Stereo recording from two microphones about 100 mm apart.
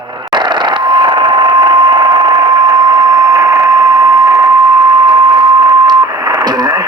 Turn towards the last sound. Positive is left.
turn(degrees=-40)  # may be behind; listen again after turning